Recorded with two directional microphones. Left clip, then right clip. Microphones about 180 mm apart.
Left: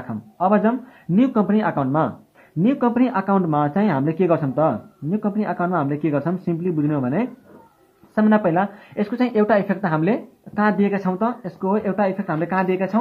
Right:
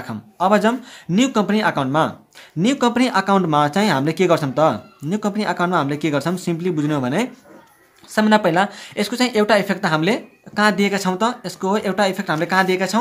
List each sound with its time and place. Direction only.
0.1 s speech: 25° right (ahead or behind)